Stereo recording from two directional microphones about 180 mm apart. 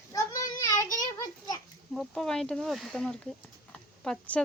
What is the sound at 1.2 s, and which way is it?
Children playing, 20° left (ahead or behind).